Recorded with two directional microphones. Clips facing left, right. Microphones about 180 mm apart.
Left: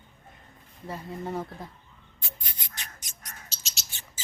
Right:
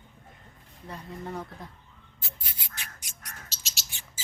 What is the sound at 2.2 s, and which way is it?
Music, 5° right (ahead or behind).